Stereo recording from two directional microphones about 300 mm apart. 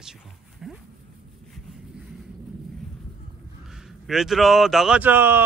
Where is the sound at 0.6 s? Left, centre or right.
Centre.